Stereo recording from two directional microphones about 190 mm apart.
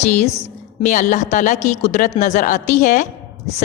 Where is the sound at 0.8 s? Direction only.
40° left (ahead or behind).